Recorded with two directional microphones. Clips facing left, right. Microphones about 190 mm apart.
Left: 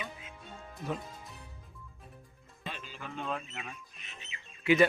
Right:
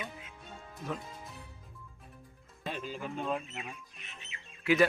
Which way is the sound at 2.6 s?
45° right (ahead or behind).